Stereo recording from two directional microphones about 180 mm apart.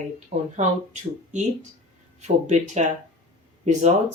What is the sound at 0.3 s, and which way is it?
Speech, 45° right (ahead or behind).